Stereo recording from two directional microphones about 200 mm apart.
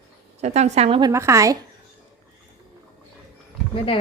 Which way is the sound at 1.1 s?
15° right (ahead or behind).